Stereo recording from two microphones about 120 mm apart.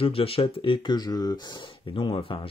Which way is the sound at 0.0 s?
50° left (ahead or behind).